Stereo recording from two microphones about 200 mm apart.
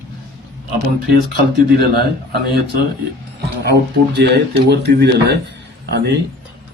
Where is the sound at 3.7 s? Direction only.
55° right (ahead or behind).